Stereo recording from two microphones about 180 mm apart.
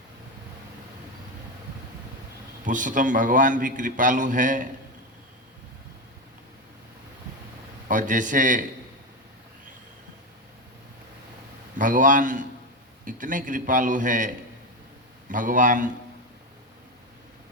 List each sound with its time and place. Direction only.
2.6 s a man's voice: 45° right (ahead or behind)
7.9 s a man's voice: 45° right (ahead or behind)
11.8 s a man's voice: 45° right (ahead or behind)